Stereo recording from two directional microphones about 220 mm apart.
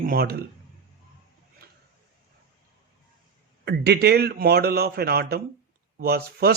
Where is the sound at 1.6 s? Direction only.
45° right (ahead or behind).